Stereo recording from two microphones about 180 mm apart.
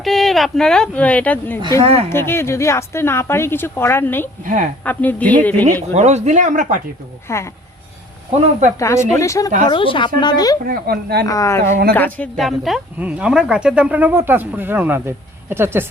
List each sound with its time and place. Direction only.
0.0 s speech: centre (ahead or behind)
1.8 s speech: 35° right (ahead or behind)
2.0 s a woman's voice: 15° left (ahead or behind)
4.4 s speech: 50° right (ahead or behind)
4.8 s a woman's voice: 10° left (ahead or behind)
5.9 s speech: 40° right (ahead or behind)
7.3 s a woman's voice: 15° left (ahead or behind)
8.3 s speech: 40° right (ahead or behind)
8.8 s a woman's voice: 15° left (ahead or behind)
9.6 s speech: 30° left (ahead or behind)
10.6 s speech: 55° right (ahead or behind)
11.3 s a woman's voice: 15° left (ahead or behind); by 15.9 s 15° right (ahead or behind)